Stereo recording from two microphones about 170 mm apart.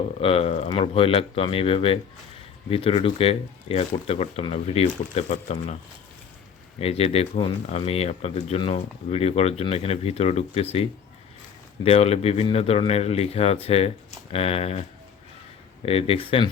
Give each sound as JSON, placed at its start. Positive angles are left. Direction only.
{"t": 0.2, "sound": "speech", "side_deg": 35}
{"t": 6.7, "sound": "speech", "side_deg": 35}
{"t": 15.9, "sound": "speech", "side_deg": 35}